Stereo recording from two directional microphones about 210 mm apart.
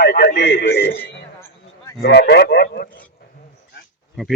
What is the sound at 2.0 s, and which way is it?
Speech, 50° left (ahead or behind).